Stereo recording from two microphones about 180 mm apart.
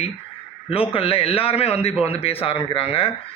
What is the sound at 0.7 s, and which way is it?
Speech, 30° left (ahead or behind).